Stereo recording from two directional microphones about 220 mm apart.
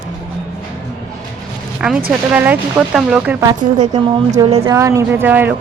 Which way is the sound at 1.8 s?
5° right (ahead or behind).